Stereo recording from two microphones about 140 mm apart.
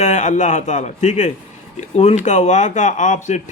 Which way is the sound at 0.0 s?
60° left (ahead or behind).